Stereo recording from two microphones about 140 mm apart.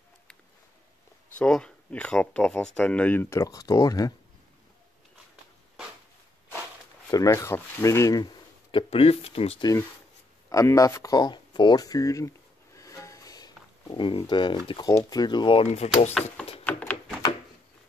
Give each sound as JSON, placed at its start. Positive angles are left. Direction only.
{"t": 1.4, "sound": "speech", "side_deg": 5}
{"t": 7.1, "sound": "rub", "side_deg": 25}
{"t": 8.7, "sound": "speech", "side_deg": 40}
{"t": 9.6, "sound": "rub", "side_deg": 25}
{"t": 10.5, "sound": "a sound", "side_deg": 25}
{"t": 14.7, "sound": "speech", "side_deg": 30}
{"t": 15.6, "sound": "speech", "side_deg": 50}
{"t": 16.7, "sound": "a sound", "side_deg": 10}